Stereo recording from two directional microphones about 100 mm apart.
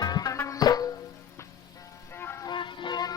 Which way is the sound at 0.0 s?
40° left (ahead or behind).